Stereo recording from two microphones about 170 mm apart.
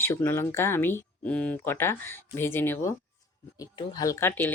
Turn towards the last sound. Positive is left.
turn(degrees=15)  # may be behind; listen again after turning